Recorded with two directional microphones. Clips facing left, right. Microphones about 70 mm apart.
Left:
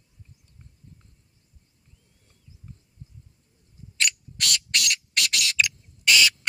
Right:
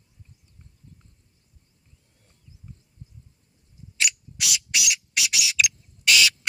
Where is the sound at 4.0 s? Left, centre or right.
Centre.